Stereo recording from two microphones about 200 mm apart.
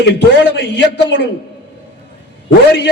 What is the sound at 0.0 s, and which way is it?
Speech, 60° left (ahead or behind).